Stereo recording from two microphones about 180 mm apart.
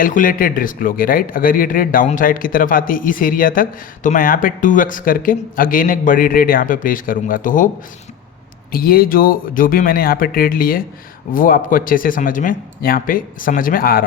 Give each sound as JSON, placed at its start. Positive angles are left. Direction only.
{"t": 0.0, "sound": "speech", "side_deg": 50}
{"t": 8.7, "sound": "speech", "side_deg": 55}